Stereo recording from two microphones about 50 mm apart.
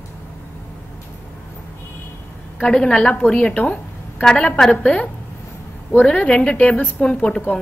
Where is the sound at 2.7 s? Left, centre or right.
Centre.